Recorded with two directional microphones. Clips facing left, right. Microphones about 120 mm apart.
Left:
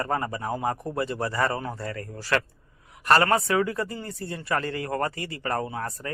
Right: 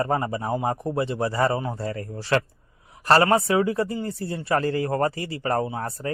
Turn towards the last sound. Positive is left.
turn(degrees=-30)  # may be behind; listen again after turning